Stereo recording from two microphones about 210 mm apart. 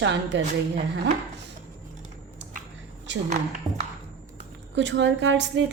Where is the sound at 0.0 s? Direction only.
60° right (ahead or behind).